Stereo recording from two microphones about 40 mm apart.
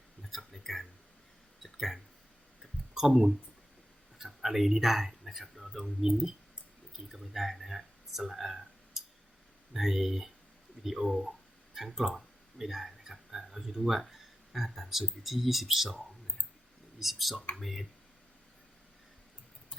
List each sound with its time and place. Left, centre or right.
0.2 s a sound: centre
2.9 s speech: centre
17.0 s speech: centre